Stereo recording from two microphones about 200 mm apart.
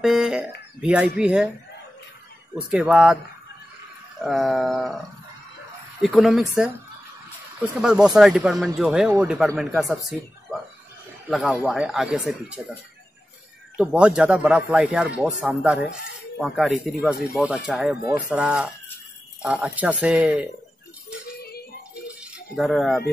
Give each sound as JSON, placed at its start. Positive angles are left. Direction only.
{"t": 0.0, "sound": "a sound", "side_deg": 0}
{"t": 0.7, "sound": "speech", "side_deg": -5}
{"t": 2.5, "sound": "speech", "side_deg": -5}
{"t": 4.2, "sound": "speech", "side_deg": 0}
{"t": 6.0, "sound": "speech", "side_deg": 0}
{"t": 7.8, "sound": "speech", "side_deg": -5}
{"t": 13.7, "sound": "speech", "side_deg": -5}
{"t": 22.2, "sound": "speech", "side_deg": 0}